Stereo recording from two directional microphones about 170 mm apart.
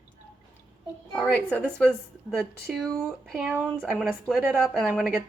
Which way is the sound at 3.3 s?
10° right (ahead or behind).